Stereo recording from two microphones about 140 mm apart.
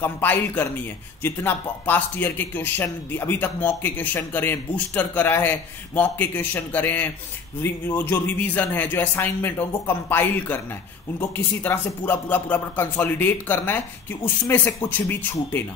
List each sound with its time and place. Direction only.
0.0 s a man's voice: 15° left (ahead or behind)